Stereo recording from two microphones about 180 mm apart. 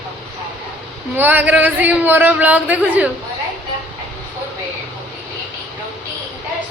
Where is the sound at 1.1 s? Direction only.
10° right (ahead or behind).